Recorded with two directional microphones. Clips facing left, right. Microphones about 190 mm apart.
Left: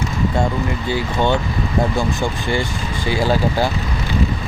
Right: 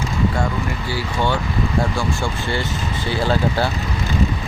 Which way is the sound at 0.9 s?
20° left (ahead or behind).